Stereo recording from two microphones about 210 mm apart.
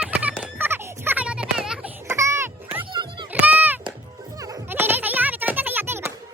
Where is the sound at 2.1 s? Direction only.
15° right (ahead or behind).